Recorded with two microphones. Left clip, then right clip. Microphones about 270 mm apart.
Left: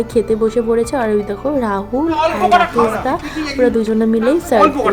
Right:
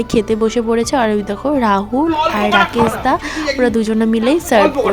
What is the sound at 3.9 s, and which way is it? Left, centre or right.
Speech, right.